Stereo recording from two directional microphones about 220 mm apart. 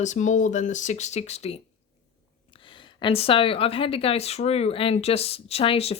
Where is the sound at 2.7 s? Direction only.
20° left (ahead or behind).